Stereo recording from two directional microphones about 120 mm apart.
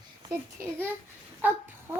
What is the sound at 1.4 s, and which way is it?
Speech, 15° right (ahead or behind).